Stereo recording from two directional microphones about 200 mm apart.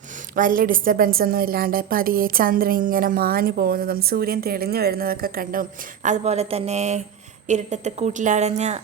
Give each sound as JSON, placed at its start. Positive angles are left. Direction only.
{"t": 0.3, "sound": "a woman's voice", "side_deg": -45}